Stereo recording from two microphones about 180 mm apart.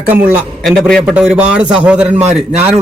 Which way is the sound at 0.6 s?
Centre (ahead or behind).